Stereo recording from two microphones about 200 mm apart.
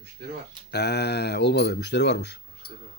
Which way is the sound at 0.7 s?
55° left (ahead or behind).